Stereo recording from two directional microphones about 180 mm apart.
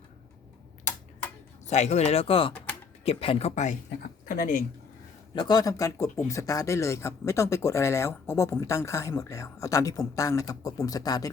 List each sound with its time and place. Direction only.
1.6 s speech: 40° left (ahead or behind)
5.3 s speech: 25° left (ahead or behind)